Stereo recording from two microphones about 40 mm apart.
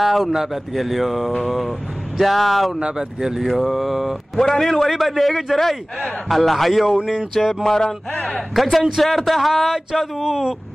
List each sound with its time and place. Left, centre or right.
0.0 s a man's voice: centre
2.8 s speech: centre
3.4 s a man's voice: centre
4.4 s a man's voice: centre
7.6 s a sound: centre
8.1 s speech: centre
8.5 s a man's voice: centre
10.2 s speech: centre